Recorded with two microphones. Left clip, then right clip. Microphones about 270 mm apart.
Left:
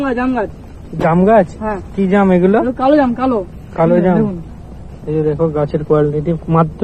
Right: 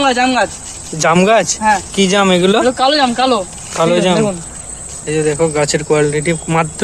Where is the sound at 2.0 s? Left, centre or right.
Right.